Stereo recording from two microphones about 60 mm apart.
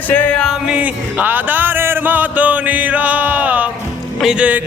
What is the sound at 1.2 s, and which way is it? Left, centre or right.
Music, right.